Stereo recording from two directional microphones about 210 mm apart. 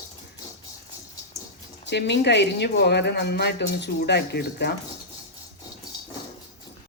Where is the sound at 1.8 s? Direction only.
55° left (ahead or behind).